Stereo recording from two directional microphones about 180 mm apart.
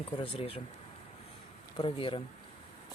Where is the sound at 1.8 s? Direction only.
30° left (ahead or behind).